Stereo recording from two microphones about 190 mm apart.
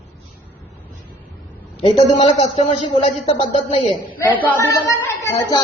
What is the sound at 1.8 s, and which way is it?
Speech, 35° left (ahead or behind).